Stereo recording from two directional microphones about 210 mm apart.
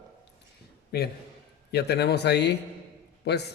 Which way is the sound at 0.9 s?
50° left (ahead or behind).